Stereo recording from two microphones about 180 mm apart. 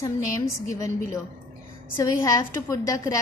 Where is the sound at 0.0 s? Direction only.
15° left (ahead or behind).